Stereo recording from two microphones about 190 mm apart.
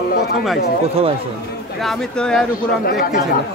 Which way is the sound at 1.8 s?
Centre (ahead or behind).